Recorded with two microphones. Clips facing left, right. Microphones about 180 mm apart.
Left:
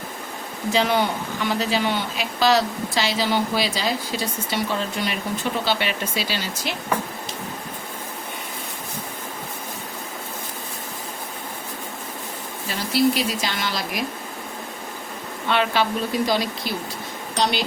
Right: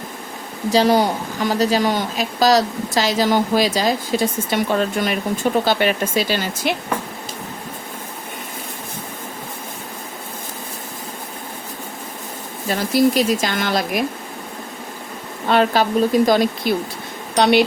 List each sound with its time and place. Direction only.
0.7 s speech: 40° right (ahead or behind)
12.6 s speech: 45° right (ahead or behind)
15.4 s a woman's voice: 40° right (ahead or behind)
17.3 s a woman's voice: 65° right (ahead or behind)